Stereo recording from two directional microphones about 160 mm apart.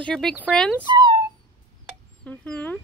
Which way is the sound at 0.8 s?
30° right (ahead or behind).